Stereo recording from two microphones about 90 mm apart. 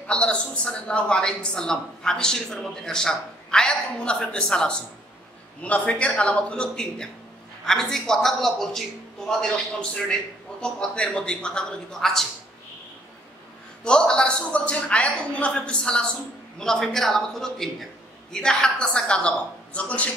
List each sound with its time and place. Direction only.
0.0 s a woman's voice: 10° left (ahead or behind)
13.8 s a woman's voice: 10° left (ahead or behind)